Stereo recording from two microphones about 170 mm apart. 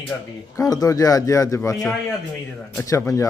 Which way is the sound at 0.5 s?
20° left (ahead or behind).